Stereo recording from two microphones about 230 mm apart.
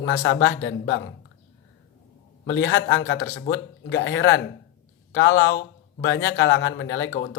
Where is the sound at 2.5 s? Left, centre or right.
Left.